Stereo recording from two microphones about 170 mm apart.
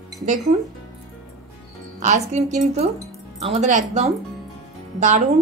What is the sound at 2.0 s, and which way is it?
A woman's voice, 45° right (ahead or behind).